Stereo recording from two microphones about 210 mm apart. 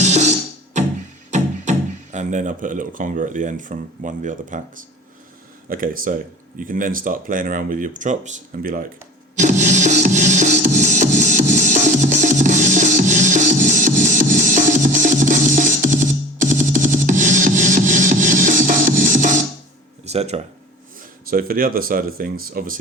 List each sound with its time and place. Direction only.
0.0 s music: 35° right (ahead or behind)
2.1 s speech: 35° right (ahead or behind)
5.6 s speech: 40° right (ahead or behind)
9.3 s music: 35° right (ahead or behind)
20.1 s a sound: 30° right (ahead or behind)
21.2 s speech: 45° right (ahead or behind)